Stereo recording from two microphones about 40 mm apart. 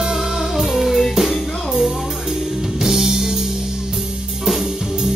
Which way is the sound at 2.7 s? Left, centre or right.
Centre.